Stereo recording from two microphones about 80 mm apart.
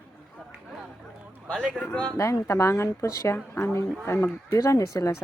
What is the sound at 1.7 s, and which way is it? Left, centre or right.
Speech, centre.